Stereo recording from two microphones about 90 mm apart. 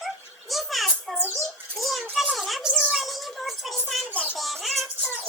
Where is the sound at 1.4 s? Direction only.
Centre (ahead or behind).